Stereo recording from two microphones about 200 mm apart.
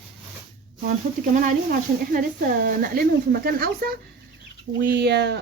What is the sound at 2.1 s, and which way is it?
Speech, 45° right (ahead or behind).